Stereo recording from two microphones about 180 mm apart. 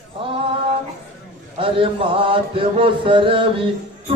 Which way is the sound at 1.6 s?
30° right (ahead or behind).